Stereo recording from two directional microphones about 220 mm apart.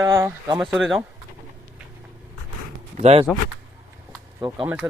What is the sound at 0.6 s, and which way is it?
Speech, centre (ahead or behind).